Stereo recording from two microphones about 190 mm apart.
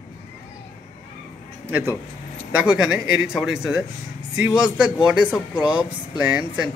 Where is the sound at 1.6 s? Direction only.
10° right (ahead or behind).